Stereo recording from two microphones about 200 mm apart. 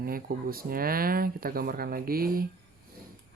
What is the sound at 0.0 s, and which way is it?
Speech, 45° right (ahead or behind).